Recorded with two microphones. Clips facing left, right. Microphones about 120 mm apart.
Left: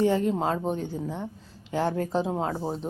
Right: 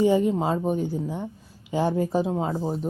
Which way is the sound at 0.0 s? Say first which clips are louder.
Right 3 dB; 10° right (ahead or behind).